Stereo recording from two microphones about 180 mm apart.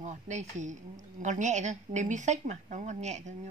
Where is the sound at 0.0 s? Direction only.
40° right (ahead or behind).